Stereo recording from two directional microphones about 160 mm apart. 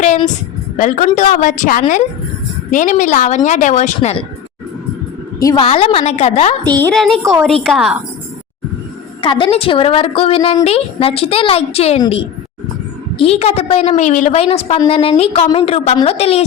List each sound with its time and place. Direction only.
0.8 s a woman's voice: 50° left (ahead or behind)
5.4 s a woman's voice: 20° left (ahead or behind)
5.6 s a woman's voice: 35° left (ahead or behind)
6.7 s a woman's voice: 10° left (ahead or behind)
9.2 s a woman's voice: 30° left (ahead or behind); by 14.4 s 50° left (ahead or behind)
14.4 s a woman's voice: 40° left (ahead or behind)